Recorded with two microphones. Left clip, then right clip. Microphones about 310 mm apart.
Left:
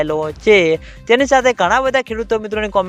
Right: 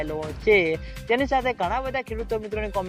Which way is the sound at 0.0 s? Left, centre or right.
Left.